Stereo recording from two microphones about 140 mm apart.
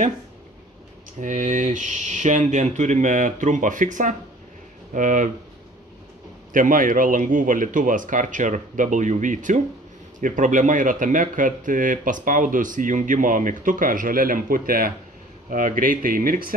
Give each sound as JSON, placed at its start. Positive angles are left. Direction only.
{"t": 1.2, "sound": "speech", "side_deg": -65}
{"t": 6.5, "sound": "speech", "side_deg": -70}